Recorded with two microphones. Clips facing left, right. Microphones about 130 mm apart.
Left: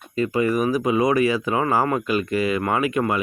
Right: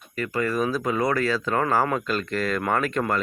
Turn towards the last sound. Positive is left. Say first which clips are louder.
# left 3 dB
turn(degrees=10)  # may be behind; listen again after turning